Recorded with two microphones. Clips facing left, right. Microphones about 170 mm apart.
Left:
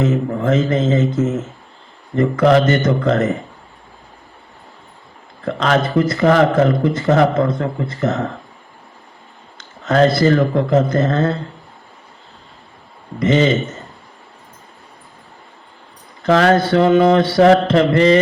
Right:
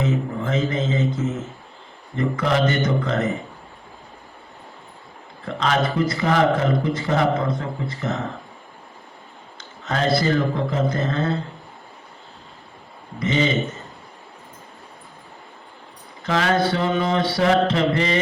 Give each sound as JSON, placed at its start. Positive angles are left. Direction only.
{"t": 0.0, "sound": "speech", "side_deg": 55}
{"t": 2.5, "sound": "speech", "side_deg": 50}
{"t": 5.5, "sound": "speech", "side_deg": 55}
{"t": 9.8, "sound": "speech", "side_deg": 50}
{"t": 13.1, "sound": "speech", "side_deg": 50}
{"t": 16.2, "sound": "speech", "side_deg": 50}